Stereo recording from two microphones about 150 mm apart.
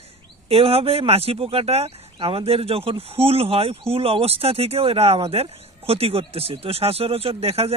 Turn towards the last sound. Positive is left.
turn(degrees=-40)  # may be behind; listen again after turning